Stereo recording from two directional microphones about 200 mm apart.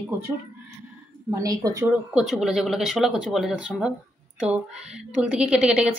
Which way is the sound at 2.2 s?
Centre (ahead or behind).